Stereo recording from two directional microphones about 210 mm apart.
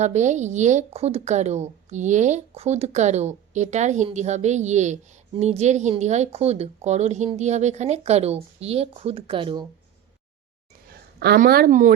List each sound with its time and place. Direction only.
0.0 s a woman's voice: 35° right (ahead or behind)
10.8 s speech: 45° right (ahead or behind)